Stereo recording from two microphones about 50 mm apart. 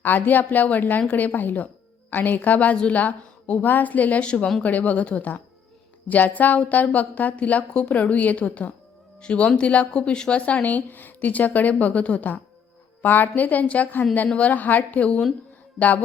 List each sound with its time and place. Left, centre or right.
0.2 s a woman's voice: left
4.6 s a woman's voice: left